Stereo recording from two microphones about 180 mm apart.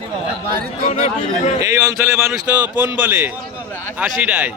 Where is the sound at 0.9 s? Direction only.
40° left (ahead or behind).